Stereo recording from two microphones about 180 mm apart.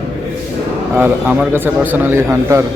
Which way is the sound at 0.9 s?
10° right (ahead or behind).